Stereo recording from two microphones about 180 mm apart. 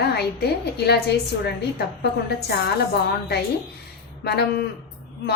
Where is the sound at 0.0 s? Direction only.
65° left (ahead or behind).